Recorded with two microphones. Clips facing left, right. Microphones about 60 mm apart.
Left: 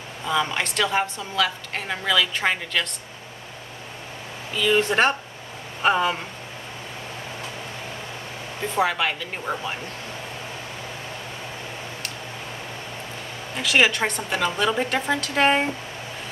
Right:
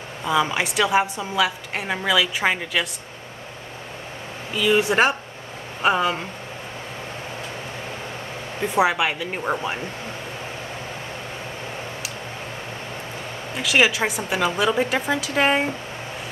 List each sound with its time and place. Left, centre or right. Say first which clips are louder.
0.2 s a woman's voice: right 3 dB; centre
4.6 s a woman's voice: right 2 dB; centre
8.7 s a woman's voice: right 3 dB; centre
13.6 s a woman's voice: right 1 dB; centre